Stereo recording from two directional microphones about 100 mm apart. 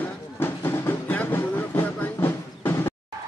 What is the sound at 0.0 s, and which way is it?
Music, 20° left (ahead or behind).